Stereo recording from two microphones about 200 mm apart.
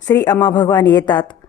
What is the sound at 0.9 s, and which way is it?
Speech, 25° left (ahead or behind).